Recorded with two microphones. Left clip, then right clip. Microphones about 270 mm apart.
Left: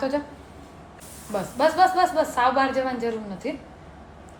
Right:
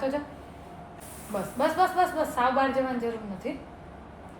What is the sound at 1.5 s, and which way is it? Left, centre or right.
Speech, left.